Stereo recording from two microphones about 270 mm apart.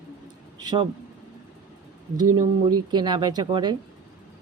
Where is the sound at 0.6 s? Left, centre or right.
Centre.